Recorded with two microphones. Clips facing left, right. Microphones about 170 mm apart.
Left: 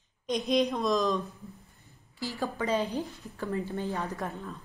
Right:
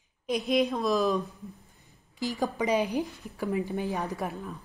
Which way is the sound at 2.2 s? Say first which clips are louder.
Right 3 dB; 15° right (ahead or behind).